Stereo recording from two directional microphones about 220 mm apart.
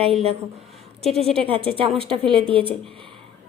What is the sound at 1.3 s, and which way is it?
Speech, 25° right (ahead or behind).